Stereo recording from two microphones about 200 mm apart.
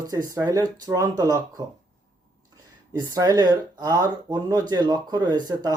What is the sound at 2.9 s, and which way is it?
Speech, 15° right (ahead or behind).